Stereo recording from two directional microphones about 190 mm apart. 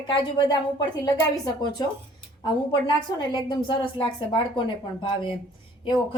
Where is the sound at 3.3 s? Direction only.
25° left (ahead or behind).